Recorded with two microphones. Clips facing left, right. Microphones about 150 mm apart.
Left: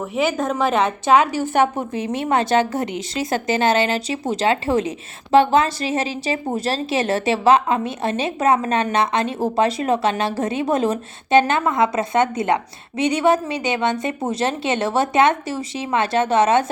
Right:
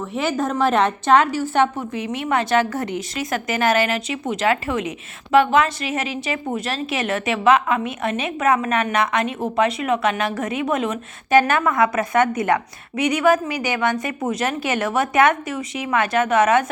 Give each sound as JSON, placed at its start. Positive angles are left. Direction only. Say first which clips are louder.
{"t": 0.2, "sound": "a woman's voice", "louder": "left 1 dB", "side_deg": 0}
{"t": 1.7, "sound": "a woman's voice", "louder": "left 2 dB", "side_deg": 45}
{"t": 2.0, "sound": "speech", "louder": "left 2 dB", "side_deg": 30}
{"t": 3.2, "sound": "a woman's voice", "louder": "left 4 dB", "side_deg": 30}